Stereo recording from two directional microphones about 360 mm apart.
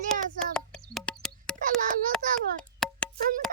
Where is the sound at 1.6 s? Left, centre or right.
Right.